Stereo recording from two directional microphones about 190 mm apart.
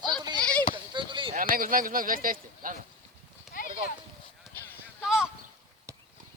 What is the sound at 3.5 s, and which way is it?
Clip-clop, centre (ahead or behind).